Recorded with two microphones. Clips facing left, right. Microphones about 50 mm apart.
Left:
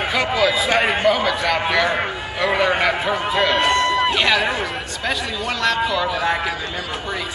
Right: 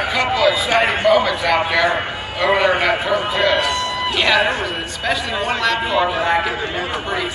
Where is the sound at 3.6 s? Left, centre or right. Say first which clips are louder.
Left 3 dB; left.